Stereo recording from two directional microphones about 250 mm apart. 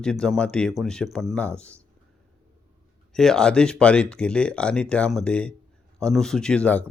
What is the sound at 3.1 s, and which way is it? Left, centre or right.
Speech, centre.